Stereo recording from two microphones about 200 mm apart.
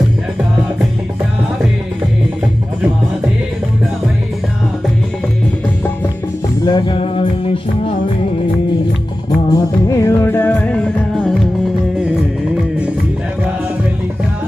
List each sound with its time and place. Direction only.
6.7 s music: 25° left (ahead or behind)
9.5 s music: 15° left (ahead or behind); by 11.3 s centre (ahead or behind)